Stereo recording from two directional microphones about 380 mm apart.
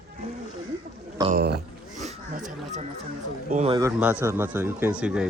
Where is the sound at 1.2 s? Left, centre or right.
Right.